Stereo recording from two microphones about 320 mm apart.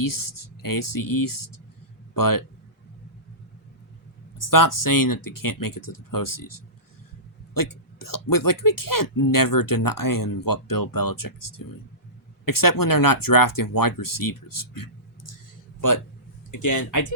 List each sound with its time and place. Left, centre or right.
0.0 s speech: left
4.4 s speech: left
16.5 s speech: left